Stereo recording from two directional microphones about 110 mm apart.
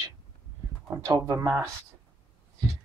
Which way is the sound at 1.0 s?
35° right (ahead or behind).